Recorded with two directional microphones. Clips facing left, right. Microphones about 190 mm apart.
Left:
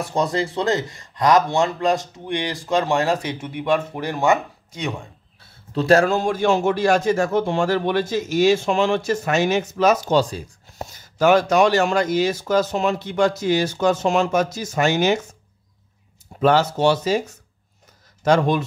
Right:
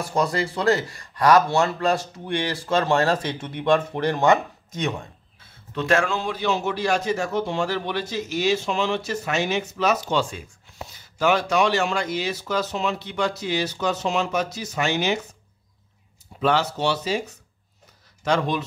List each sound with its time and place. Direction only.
0.0 s speech: 20° left (ahead or behind)
5.8 s a man's voice: 35° left (ahead or behind)
16.3 s a man's voice: 45° left (ahead or behind)
18.2 s a man's voice: 45° left (ahead or behind)